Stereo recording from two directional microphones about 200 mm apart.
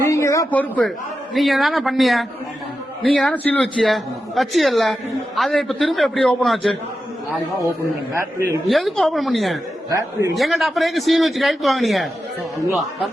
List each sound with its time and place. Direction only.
0.1 s a man's voice: 15° left (ahead or behind)
8.1 s a man's voice: 10° right (ahead or behind)
8.6 s a man's voice: centre (ahead or behind)
9.9 s a man's voice: 15° right (ahead or behind)
10.3 s a man's voice: centre (ahead or behind)